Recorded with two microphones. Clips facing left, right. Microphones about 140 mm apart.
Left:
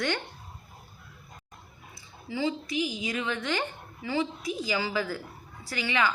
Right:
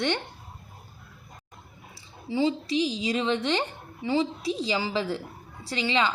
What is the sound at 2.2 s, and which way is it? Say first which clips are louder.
A woman's voice: right 5 dB; 30° right (ahead or behind).